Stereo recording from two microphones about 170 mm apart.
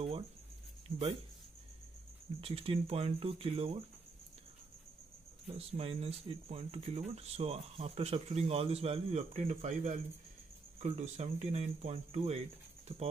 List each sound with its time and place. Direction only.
0.8 s speech: 35° right (ahead or behind)
2.4 s speech: 35° right (ahead or behind)
5.5 s speech: 35° right (ahead or behind)